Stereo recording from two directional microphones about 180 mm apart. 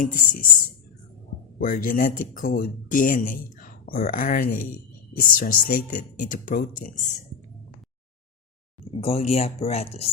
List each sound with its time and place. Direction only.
0.0 s speech: 50° left (ahead or behind)
1.5 s speech: 50° left (ahead or behind)
9.0 s speech: 35° left (ahead or behind)